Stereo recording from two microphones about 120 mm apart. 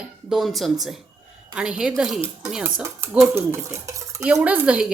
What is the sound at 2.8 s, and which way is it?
Stir, 20° right (ahead or behind).